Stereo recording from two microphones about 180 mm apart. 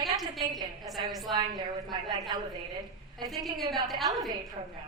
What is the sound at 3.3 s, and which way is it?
Speech, centre (ahead or behind).